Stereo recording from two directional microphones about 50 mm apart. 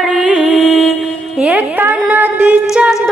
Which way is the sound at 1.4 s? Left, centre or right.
Right.